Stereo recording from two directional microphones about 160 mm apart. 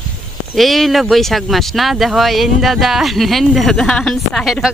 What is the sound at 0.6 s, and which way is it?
Speech, centre (ahead or behind).